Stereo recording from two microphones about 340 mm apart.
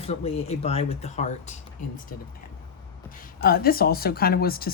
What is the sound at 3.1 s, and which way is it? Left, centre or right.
Speech, left.